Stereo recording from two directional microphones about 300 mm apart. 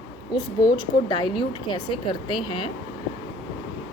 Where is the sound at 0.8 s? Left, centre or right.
Centre.